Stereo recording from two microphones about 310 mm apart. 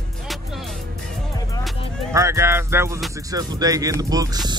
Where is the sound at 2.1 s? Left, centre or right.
Centre.